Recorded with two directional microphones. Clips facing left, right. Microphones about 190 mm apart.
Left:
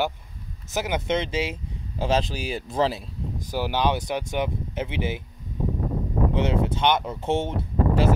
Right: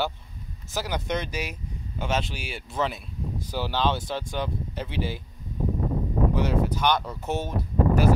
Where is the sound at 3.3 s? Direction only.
15° left (ahead or behind).